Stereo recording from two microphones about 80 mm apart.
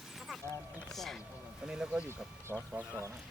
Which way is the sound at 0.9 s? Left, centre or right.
Centre.